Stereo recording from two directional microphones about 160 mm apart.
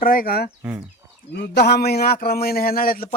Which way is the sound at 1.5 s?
90° left.